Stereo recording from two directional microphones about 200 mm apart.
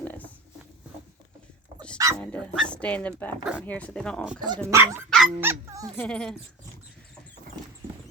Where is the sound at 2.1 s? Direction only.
5° left (ahead or behind).